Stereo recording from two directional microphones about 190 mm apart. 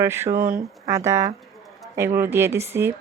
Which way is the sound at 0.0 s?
15° right (ahead or behind).